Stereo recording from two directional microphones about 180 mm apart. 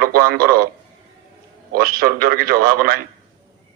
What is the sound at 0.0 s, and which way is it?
Speech, 55° right (ahead or behind).